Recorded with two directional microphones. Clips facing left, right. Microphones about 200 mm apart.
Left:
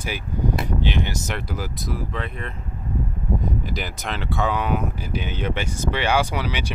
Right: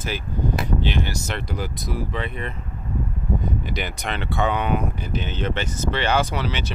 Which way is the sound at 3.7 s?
Centre (ahead or behind).